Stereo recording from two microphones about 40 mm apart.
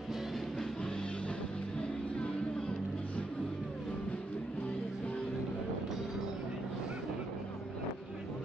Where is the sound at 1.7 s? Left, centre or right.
Left.